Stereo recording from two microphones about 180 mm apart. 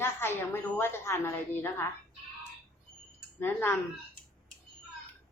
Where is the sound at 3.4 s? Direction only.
10° left (ahead or behind).